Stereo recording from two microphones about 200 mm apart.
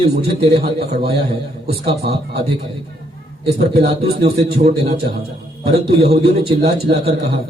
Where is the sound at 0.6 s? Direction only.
50° right (ahead or behind).